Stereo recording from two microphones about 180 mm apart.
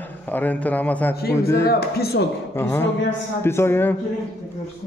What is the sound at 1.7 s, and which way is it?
Speech, 60° left (ahead or behind).